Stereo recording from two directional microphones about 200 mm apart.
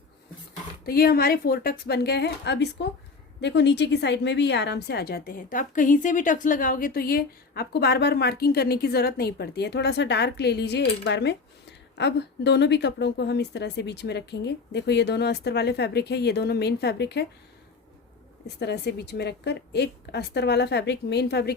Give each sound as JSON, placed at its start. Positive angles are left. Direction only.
{"t": 0.9, "sound": "a woman's voice", "side_deg": 50}
{"t": 18.4, "sound": "a woman's voice", "side_deg": 55}